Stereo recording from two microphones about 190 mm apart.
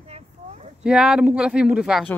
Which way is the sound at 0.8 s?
5° right (ahead or behind).